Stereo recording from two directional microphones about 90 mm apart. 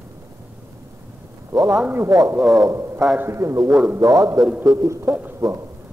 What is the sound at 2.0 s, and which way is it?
Speech, 40° right (ahead or behind).